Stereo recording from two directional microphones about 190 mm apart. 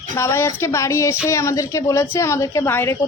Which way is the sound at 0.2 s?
15° left (ahead or behind).